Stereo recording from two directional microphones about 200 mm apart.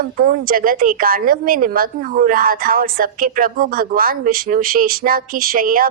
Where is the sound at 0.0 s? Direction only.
45° right (ahead or behind).